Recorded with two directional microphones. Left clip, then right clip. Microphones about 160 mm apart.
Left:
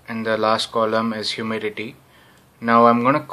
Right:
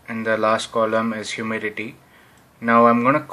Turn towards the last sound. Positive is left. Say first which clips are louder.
# even
turn(degrees=10)  # may be behind; listen again after turning